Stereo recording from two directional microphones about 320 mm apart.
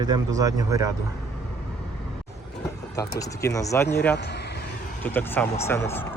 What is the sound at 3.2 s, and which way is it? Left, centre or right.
Speech, centre.